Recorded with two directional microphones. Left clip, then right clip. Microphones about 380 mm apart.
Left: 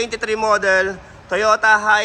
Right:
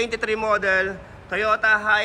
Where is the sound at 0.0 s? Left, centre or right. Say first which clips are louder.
Left 3 dB; centre.